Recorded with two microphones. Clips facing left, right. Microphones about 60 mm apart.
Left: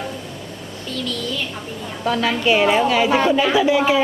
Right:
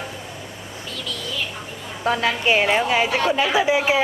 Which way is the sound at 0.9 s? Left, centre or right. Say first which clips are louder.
Left 6 dB; centre.